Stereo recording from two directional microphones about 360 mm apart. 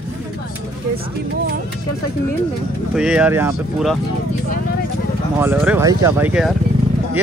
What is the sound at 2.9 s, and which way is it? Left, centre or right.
Speech, centre.